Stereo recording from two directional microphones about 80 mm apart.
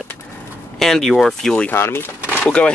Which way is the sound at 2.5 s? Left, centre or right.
Centre.